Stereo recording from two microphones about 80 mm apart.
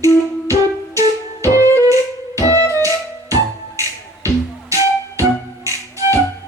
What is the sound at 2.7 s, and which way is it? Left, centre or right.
Music, right.